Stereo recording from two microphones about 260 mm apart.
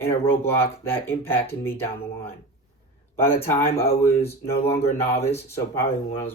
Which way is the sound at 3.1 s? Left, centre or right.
Centre.